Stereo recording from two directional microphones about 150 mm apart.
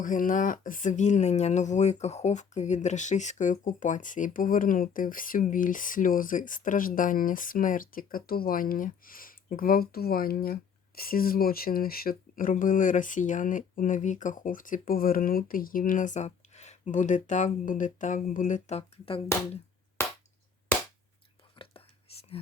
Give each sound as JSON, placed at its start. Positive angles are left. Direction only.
{"t": 0.0, "sound": "speech", "side_deg": 60}
{"t": 18.8, "sound": "speech", "side_deg": 40}
{"t": 22.1, "sound": "whispering", "side_deg": 40}